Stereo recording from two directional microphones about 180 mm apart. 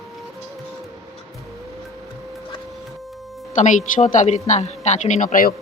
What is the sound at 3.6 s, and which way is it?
A woman's voice, 40° left (ahead or behind).